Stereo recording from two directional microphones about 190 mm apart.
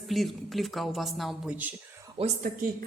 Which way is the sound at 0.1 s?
Centre (ahead or behind).